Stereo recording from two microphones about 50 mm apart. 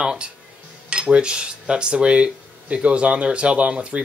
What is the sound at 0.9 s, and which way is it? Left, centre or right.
Cutlery, centre.